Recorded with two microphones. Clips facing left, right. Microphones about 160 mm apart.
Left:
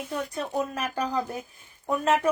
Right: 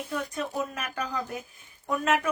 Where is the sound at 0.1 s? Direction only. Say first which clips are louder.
Left 2 dB; 35° left (ahead or behind).